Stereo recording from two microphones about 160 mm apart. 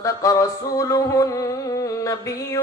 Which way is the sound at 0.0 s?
20° left (ahead or behind).